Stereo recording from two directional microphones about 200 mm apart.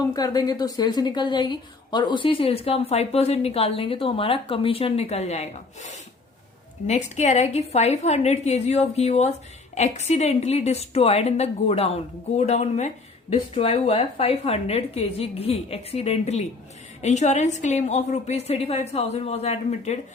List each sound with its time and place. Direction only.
0.1 s a woman's voice: 20° left (ahead or behind)